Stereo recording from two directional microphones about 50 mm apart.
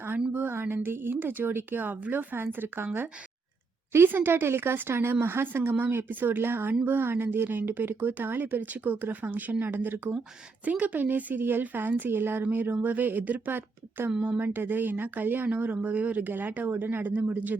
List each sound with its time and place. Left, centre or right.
0.5 s a woman's voice: right